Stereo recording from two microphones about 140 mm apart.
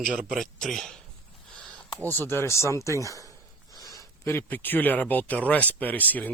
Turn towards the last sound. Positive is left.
turn(degrees=10)  # may be behind; listen again after turning